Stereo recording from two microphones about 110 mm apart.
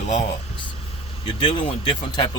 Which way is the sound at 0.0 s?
80° left.